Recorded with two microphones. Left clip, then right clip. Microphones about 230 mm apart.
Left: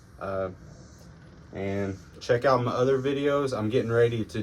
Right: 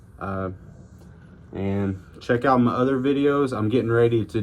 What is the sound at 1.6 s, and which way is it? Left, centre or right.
Speech, right.